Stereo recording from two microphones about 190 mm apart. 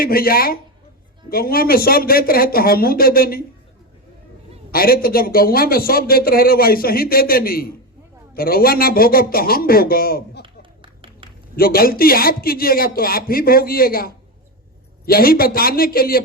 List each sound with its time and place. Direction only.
0.0 s speech: 50° left (ahead or behind)
4.7 s speech: 50° left (ahead or behind)
10.4 s a sound: 25° right (ahead or behind)
11.5 s speech: 50° left (ahead or behind)